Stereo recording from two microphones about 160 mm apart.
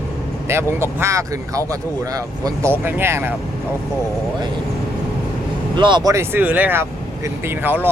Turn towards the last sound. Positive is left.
turn(degrees=-10)  # may be behind; listen again after turning